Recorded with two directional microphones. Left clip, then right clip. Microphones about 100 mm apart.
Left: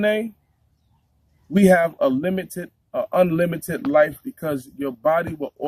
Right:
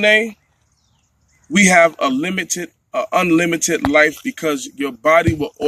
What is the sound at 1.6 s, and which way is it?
Speech, 35° left (ahead or behind).